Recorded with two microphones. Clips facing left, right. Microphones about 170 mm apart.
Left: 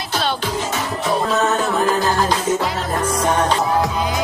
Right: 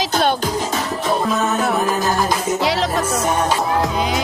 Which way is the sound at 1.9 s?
15° right (ahead or behind).